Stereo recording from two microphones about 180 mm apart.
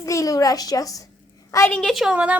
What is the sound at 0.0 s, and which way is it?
A woman's voice, 20° left (ahead or behind).